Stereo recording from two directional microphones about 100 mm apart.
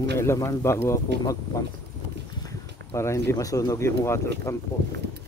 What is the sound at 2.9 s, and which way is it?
Speech, 30° left (ahead or behind).